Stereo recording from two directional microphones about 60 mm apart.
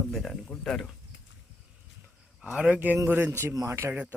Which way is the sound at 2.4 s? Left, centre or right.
Centre.